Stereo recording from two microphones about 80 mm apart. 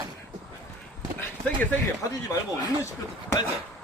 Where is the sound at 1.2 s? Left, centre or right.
Left.